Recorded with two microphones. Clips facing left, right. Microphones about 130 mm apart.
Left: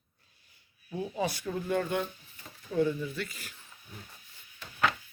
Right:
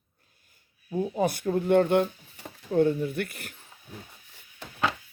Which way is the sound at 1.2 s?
50° right (ahead or behind).